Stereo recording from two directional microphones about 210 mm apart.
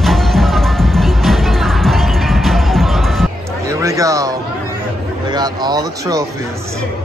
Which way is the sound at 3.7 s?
15° right (ahead or behind).